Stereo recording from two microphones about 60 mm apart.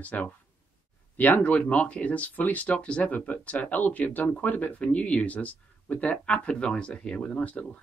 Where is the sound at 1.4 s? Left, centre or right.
Left.